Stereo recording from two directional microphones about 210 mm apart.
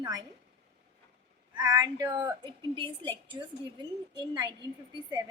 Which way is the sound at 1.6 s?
20° right (ahead or behind).